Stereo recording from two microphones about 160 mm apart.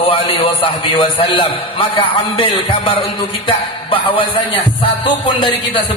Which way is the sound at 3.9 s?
30° left (ahead or behind).